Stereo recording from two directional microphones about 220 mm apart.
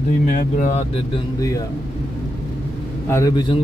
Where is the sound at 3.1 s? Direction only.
15° left (ahead or behind).